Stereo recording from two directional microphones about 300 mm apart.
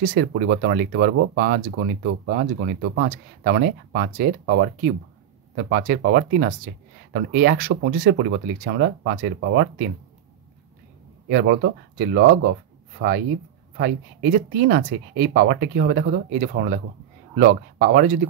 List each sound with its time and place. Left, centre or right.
0.0 s speech: right
5.7 s speech: right
11.2 s speech: right
13.7 s speech: right